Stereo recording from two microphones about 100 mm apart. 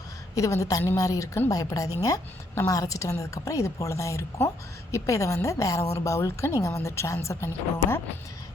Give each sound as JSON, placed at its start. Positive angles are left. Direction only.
{"t": 0.3, "sound": "a woman's voice", "side_deg": 35}